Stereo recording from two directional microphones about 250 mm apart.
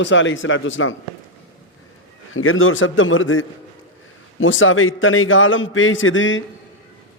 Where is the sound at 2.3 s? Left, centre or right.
Left.